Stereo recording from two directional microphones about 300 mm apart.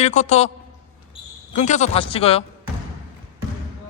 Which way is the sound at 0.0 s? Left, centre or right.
Left.